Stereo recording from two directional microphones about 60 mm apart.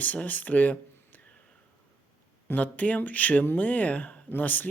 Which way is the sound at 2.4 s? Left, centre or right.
Left.